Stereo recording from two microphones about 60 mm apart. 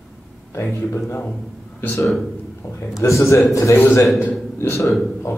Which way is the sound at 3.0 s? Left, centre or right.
Left.